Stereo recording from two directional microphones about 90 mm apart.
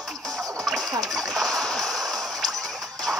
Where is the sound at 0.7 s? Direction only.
Centre (ahead or behind).